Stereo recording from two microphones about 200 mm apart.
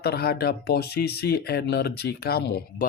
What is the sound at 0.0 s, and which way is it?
Speech, 55° left (ahead or behind).